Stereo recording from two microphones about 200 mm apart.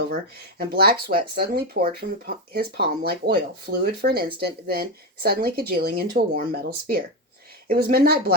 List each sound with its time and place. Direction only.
0.8 s speech: 50° right (ahead or behind)